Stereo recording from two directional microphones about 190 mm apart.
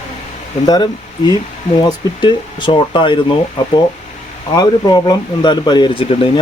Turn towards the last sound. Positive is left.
turn(degrees=30)  # may be behind; listen again after turning